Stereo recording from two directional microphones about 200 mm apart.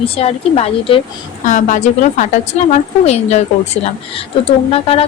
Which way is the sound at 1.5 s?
40° left (ahead or behind).